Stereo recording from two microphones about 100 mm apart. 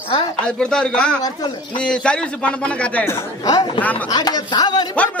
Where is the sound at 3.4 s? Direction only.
40° left (ahead or behind).